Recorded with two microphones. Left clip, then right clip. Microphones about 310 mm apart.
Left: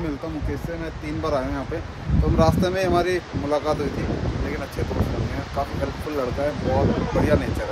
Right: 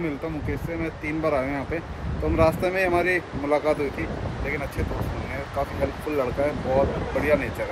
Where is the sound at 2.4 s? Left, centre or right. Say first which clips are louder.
Even; centre.